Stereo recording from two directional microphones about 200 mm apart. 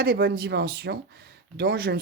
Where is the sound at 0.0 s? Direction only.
50° right (ahead or behind).